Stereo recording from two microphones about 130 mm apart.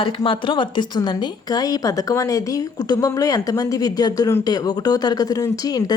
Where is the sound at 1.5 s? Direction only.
30° left (ahead or behind).